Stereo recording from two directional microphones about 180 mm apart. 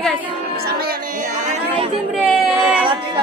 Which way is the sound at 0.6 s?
60° right (ahead or behind).